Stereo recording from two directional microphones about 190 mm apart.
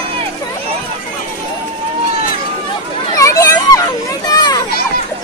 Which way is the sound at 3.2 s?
15° left (ahead or behind).